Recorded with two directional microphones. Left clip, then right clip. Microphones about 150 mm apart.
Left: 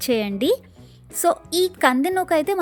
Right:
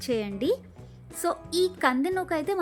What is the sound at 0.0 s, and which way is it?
A woman's voice, 50° left (ahead or behind).